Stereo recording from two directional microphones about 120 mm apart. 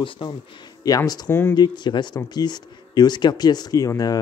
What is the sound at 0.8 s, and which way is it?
Speech, 30° left (ahead or behind).